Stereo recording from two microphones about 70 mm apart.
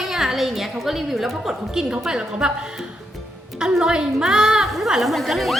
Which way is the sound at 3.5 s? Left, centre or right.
Centre.